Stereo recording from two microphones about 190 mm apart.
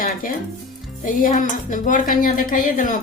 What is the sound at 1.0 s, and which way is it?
Speech, 45° left (ahead or behind).